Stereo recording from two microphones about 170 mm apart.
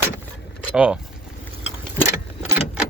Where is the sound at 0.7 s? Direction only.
5° right (ahead or behind).